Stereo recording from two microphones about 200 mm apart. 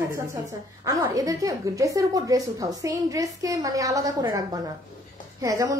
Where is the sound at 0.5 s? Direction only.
15° right (ahead or behind).